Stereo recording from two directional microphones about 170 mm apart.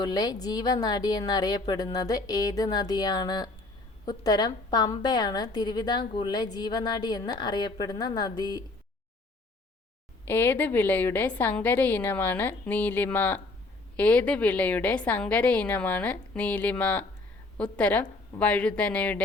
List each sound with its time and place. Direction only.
0.0 s a woman's voice: 25° left (ahead or behind)
10.2 s a woman's voice: 10° left (ahead or behind)